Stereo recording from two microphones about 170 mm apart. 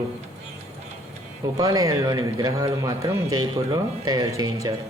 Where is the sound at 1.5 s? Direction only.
20° right (ahead or behind).